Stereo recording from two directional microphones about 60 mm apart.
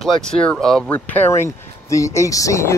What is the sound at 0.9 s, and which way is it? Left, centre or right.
Speech, left.